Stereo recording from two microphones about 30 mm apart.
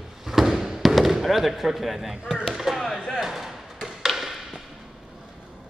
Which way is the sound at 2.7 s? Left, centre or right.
Centre.